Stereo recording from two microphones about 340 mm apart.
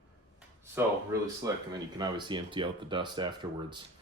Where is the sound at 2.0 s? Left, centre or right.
Centre.